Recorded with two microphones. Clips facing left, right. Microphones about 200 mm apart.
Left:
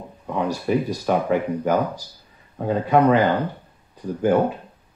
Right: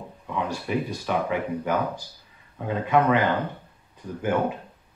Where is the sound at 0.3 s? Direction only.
40° left (ahead or behind).